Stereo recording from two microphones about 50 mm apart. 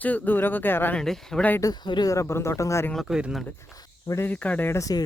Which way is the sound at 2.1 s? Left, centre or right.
Left.